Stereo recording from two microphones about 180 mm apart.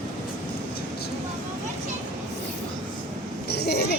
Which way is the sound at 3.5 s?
65° left (ahead or behind).